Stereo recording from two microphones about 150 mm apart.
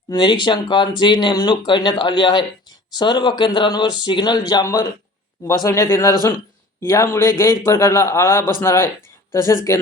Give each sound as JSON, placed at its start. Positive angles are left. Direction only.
{"t": 0.1, "sound": "a man's voice", "side_deg": 30}